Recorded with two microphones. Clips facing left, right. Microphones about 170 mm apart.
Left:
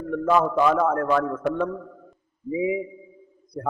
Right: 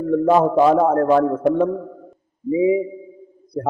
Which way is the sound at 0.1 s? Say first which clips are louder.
Right 6 dB; 35° right (ahead or behind).